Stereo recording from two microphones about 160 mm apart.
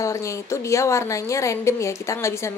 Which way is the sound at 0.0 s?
20° left (ahead or behind).